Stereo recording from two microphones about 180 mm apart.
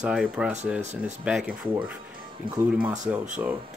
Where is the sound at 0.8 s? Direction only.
40° right (ahead or behind).